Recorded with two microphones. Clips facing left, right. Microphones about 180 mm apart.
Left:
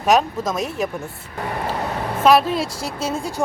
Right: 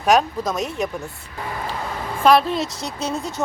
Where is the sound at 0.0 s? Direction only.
Centre (ahead or behind).